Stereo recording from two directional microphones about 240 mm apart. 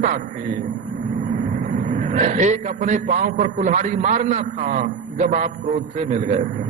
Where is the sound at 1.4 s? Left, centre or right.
Right.